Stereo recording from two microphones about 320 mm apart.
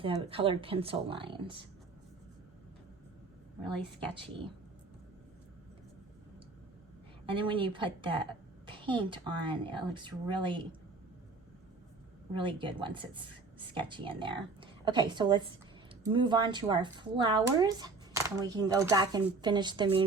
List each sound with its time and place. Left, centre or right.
0.0 s speech: centre
7.3 s speech: centre
12.3 s speech: centre